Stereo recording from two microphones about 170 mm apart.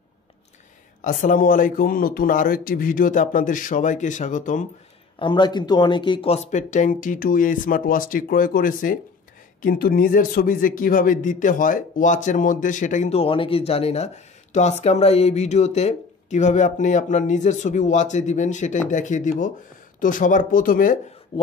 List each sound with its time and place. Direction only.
1.0 s a man's voice: 50° left (ahead or behind)
5.2 s a man's voice: 25° left (ahead or behind); by 21.0 s 55° left (ahead or behind)
21.3 s speech: 30° left (ahead or behind)